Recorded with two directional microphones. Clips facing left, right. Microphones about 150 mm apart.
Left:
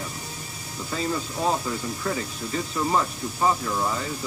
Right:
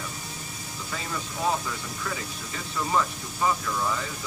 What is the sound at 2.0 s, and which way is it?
Speech, 35° left (ahead or behind).